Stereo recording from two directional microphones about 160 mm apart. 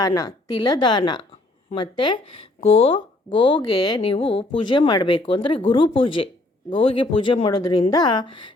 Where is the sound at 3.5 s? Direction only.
25° left (ahead or behind).